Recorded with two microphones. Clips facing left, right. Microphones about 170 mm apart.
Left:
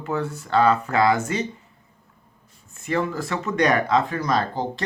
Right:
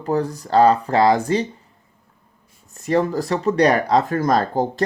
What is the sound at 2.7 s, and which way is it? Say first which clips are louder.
Speech: right 5 dB; 40° right (ahead or behind).